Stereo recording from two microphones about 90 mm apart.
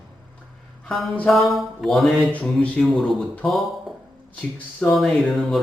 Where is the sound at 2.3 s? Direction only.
15° left (ahead or behind).